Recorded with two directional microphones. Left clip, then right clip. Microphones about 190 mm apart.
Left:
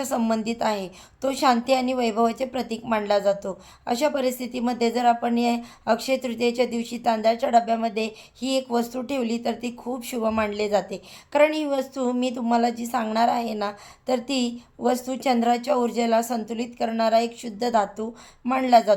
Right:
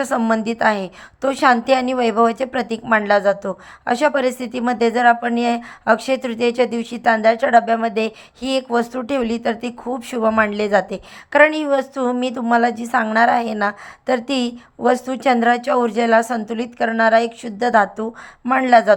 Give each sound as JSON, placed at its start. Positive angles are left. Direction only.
{"t": 0.0, "sound": "a woman's voice", "side_deg": -20}